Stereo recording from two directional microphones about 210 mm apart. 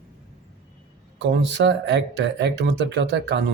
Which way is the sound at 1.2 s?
55° right (ahead or behind).